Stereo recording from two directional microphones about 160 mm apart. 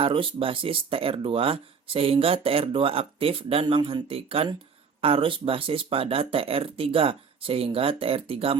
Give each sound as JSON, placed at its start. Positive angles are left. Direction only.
{"t": 0.0, "sound": "speech", "side_deg": -35}